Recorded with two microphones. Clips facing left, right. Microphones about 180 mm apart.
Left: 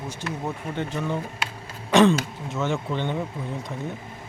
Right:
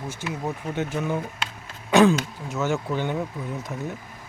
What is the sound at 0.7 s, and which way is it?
Speech, 10° right (ahead or behind).